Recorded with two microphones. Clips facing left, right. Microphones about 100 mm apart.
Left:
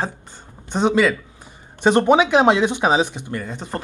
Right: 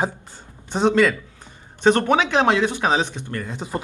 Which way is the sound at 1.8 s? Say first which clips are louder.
Left 3 dB; 15° left (ahead or behind).